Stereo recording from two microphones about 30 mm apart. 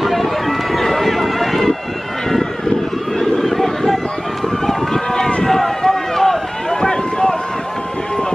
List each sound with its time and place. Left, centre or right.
0.0 s run: centre
3.2 s a sound: centre
5.4 s run: centre
6.8 s run: left